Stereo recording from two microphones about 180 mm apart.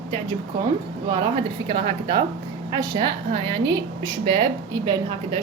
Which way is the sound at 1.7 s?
30° right (ahead or behind).